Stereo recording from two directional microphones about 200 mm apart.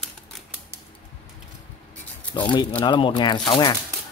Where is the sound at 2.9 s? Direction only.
25° left (ahead or behind).